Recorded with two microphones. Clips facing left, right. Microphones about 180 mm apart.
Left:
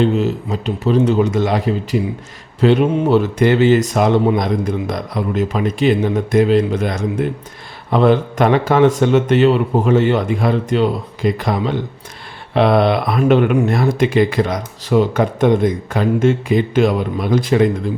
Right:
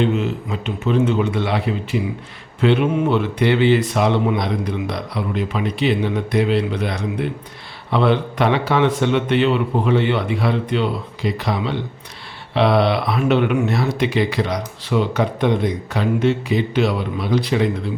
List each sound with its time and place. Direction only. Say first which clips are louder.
0.0 s a man's voice: left 4 dB; 40° left (ahead or behind)